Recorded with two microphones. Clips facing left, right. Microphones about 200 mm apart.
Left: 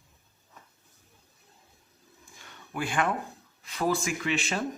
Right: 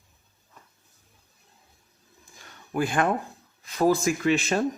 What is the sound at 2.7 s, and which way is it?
Speech, 40° right (ahead or behind).